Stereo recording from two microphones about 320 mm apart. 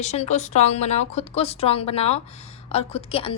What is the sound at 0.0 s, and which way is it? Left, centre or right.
A woman's voice, left.